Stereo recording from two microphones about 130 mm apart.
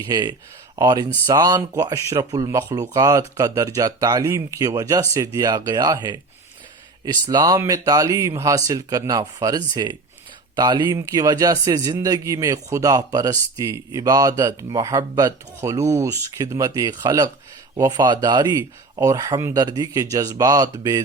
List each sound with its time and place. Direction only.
0.1 s speech: 30° right (ahead or behind)